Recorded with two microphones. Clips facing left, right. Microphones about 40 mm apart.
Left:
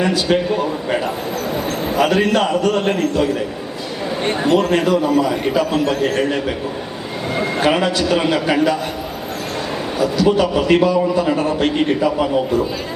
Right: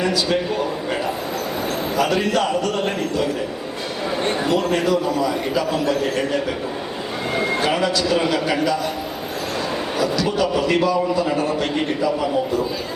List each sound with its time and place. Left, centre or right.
0.0 s a man's voice: left
2.0 s a man's voice: left
4.4 s a man's voice: left
10.0 s a man's voice: left